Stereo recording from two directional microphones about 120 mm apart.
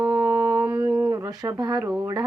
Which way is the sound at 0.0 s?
35° right (ahead or behind).